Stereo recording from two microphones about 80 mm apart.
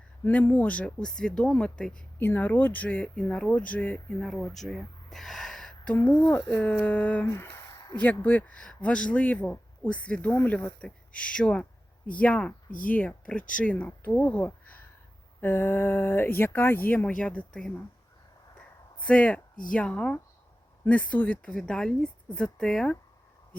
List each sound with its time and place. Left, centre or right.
0.3 s speech: centre
2.1 s speech: left
4.4 s a sound: centre
6.5 s speech: centre
7.8 s a sound: left
8.0 s speech: left
18.9 s speech: centre